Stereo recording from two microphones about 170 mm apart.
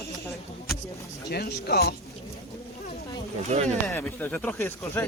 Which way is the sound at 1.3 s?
70° left (ahead or behind).